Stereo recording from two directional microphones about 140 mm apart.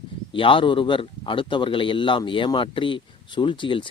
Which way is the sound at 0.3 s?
40° left (ahead or behind).